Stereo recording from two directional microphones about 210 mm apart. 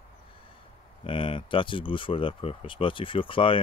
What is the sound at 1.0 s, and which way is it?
Speech, 25° left (ahead or behind).